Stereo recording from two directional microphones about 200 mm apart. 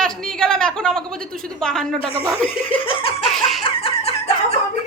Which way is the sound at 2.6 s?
25° left (ahead or behind).